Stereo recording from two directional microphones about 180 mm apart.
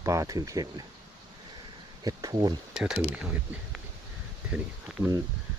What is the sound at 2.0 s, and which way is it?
Speech, 20° right (ahead or behind).